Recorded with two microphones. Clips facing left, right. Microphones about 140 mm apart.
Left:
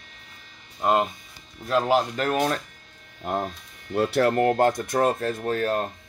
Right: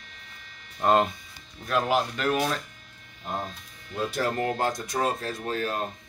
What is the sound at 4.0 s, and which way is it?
Speech, 65° left (ahead or behind).